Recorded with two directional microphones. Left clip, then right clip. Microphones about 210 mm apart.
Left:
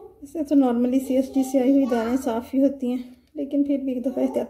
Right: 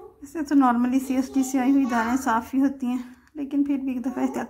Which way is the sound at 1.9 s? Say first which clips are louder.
Right 1 dB; 45° right (ahead or behind).